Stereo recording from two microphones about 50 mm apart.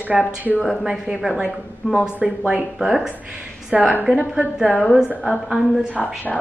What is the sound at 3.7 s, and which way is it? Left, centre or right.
Speech, right.